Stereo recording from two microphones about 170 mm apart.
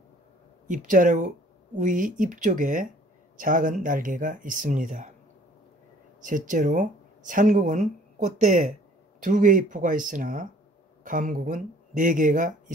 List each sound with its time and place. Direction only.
0.7 s speech: 50° right (ahead or behind)
6.2 s speech: 50° right (ahead or behind)